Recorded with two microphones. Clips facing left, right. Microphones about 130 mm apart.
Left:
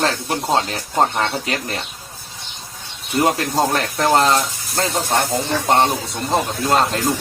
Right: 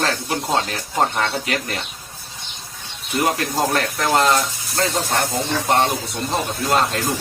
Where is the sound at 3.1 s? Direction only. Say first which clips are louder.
Left 3 dB; 25° left (ahead or behind).